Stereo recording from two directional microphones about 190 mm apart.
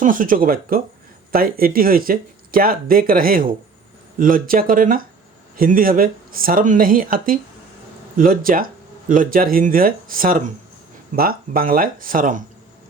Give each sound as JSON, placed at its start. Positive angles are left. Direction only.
{"t": 0.0, "sound": "speech", "side_deg": -45}